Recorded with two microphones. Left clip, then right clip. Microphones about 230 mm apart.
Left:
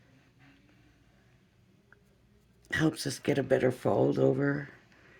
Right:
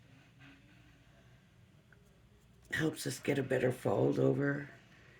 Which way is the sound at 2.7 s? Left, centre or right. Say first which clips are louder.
Left 6 dB; left.